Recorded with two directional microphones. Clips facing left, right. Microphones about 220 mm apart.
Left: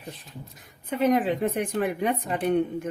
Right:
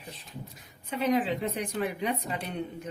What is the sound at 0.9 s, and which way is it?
Speech, 50° left (ahead or behind).